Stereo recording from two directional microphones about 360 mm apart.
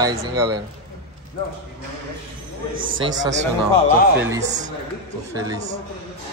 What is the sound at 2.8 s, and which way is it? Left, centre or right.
Speech, right.